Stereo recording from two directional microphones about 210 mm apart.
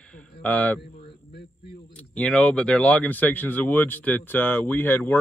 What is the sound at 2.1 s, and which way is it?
Speech, 5° left (ahead or behind).